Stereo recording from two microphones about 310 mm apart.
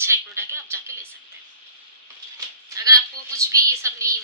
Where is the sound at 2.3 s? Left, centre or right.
Centre.